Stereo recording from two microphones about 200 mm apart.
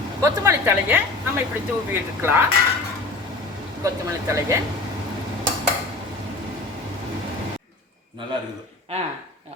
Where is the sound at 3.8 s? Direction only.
15° right (ahead or behind).